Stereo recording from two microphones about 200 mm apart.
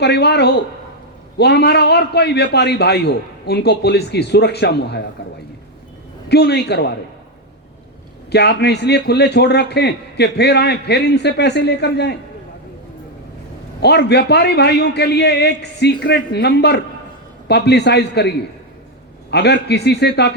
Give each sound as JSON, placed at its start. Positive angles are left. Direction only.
{"t": 0.0, "sound": "a man's voice", "side_deg": 55}
{"t": 6.2, "sound": "a man's voice", "side_deg": 55}
{"t": 8.3, "sound": "a man's voice", "side_deg": 55}
{"t": 13.8, "sound": "a man's voice", "side_deg": 55}